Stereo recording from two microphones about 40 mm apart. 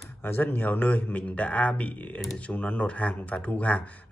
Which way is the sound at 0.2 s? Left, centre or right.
Left.